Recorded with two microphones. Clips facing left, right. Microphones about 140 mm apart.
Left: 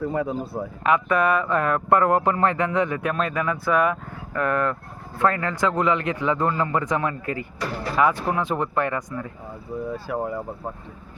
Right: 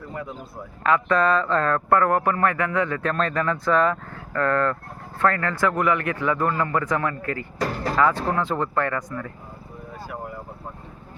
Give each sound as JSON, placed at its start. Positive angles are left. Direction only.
{"t": 0.3, "sound": "speech", "side_deg": 35}
{"t": 0.9, "sound": "a man's voice", "side_deg": 15}